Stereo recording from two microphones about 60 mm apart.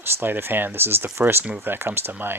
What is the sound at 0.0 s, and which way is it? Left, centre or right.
Speech, right.